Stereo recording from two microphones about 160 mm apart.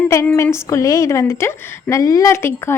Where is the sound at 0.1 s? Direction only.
20° left (ahead or behind).